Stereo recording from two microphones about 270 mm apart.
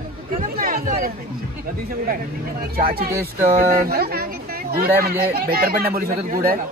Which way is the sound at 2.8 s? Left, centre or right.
Right.